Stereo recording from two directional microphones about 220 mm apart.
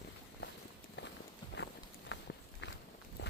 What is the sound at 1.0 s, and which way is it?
Walk, 55° left (ahead or behind).